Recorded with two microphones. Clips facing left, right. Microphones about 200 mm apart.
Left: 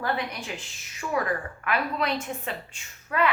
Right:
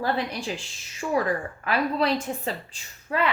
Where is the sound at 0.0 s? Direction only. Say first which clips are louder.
Right 3 dB; 30° right (ahead or behind).